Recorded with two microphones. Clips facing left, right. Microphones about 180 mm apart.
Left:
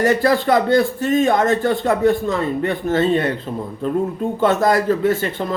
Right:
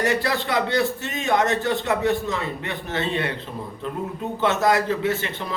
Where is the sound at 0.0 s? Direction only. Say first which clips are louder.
Left 7 dB; 45° left (ahead or behind).